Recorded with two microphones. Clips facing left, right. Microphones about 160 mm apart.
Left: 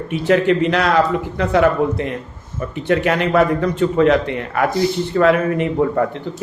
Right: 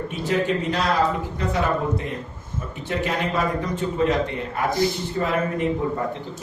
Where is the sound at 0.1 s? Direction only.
75° left (ahead or behind).